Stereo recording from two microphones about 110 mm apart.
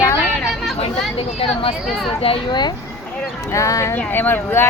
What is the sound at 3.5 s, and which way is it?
Speech, 30° left (ahead or behind).